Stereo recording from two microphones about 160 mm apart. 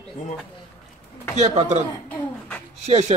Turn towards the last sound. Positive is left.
turn(degrees=-40)  # may be behind; listen again after turning